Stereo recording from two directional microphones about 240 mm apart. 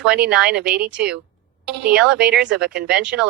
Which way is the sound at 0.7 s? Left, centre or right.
Right.